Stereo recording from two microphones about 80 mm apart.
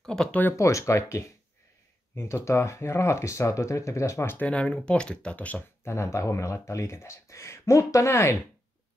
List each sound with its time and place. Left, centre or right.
0.0 s speech: centre
0.6 s speech: left
4.4 s speech: centre
5.9 s speech: left